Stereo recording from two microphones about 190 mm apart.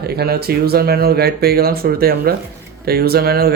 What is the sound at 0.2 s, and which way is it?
Speech, 55° right (ahead or behind).